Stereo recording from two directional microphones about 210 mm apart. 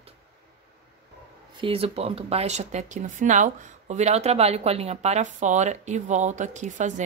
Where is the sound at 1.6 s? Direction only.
25° right (ahead or behind).